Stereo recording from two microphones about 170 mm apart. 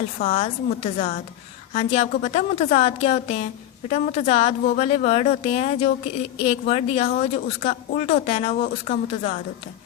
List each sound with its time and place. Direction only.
0.2 s a woman's voice: 45° left (ahead or behind)